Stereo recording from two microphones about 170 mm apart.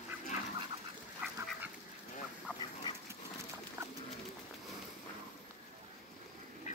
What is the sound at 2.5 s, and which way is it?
Duck, 10° right (ahead or behind).